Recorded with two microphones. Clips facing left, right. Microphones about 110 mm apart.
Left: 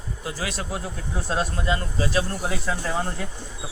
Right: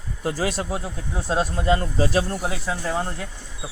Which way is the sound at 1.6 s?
35° right (ahead or behind).